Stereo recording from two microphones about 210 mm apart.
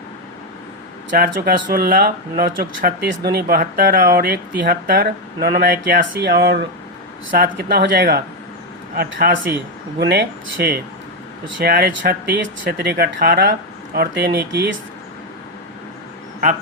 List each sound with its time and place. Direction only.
1.1 s speech: 45° right (ahead or behind)